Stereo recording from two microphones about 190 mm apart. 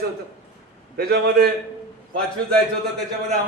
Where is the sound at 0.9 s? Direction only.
55° right (ahead or behind).